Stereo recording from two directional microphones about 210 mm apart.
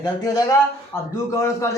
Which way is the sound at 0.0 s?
20° left (ahead or behind).